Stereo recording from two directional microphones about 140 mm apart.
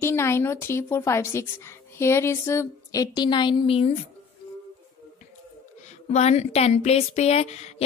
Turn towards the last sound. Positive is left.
turn(degrees=50)  # may be behind; listen again after turning